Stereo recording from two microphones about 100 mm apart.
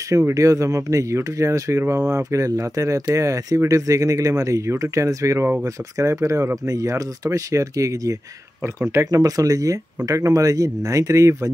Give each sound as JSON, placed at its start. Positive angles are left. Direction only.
{"t": 0.1, "sound": "speech", "side_deg": -30}